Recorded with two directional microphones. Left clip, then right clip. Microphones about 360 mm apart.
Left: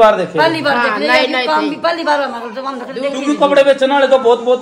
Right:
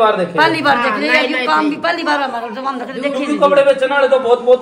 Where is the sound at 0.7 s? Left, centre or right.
Left.